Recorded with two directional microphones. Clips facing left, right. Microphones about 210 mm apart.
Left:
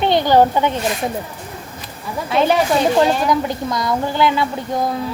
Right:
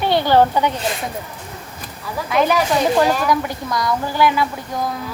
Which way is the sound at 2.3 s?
30° left (ahead or behind).